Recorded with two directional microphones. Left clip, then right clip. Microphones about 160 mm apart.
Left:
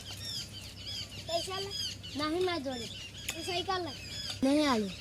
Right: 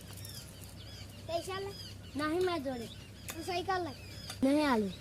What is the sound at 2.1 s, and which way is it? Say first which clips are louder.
Speech: even; 15° right (ahead or behind).